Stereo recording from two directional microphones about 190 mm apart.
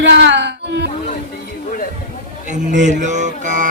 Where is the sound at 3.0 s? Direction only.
40° right (ahead or behind).